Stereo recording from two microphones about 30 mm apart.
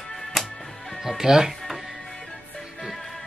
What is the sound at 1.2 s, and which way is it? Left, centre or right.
Speech, centre.